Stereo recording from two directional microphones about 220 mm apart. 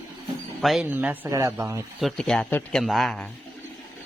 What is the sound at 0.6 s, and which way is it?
Speech, 5° right (ahead or behind).